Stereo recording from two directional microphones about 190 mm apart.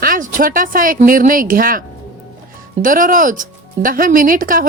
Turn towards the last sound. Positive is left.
turn(degrees=-45)  # may be behind; listen again after turning